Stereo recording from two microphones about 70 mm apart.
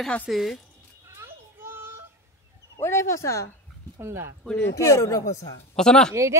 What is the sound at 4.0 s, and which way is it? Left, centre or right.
Speech, right.